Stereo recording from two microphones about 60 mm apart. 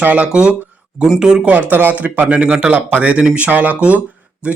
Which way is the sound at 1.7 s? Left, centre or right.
Right.